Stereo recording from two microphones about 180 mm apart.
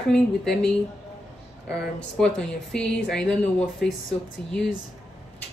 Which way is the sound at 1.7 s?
5° left (ahead or behind).